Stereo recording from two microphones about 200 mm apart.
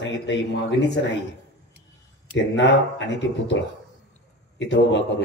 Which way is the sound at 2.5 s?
65° left (ahead or behind).